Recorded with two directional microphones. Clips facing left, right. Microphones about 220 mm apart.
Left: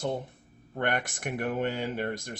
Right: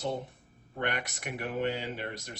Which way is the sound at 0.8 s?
50° left (ahead or behind).